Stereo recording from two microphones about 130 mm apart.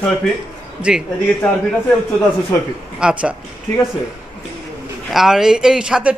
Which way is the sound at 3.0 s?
10° right (ahead or behind).